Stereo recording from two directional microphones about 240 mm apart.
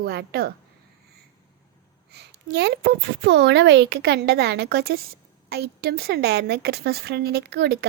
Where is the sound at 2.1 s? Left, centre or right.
Right.